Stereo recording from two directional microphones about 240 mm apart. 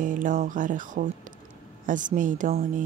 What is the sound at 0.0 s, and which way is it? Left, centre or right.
Speech, right.